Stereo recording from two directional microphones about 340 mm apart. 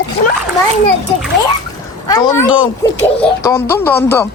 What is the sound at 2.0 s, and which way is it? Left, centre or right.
Speech, centre.